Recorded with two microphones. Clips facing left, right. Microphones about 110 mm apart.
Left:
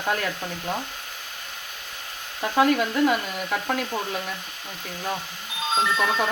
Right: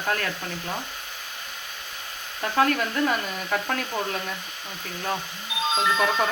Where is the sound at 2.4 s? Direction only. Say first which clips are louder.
Left 2 dB; 15° left (ahead or behind).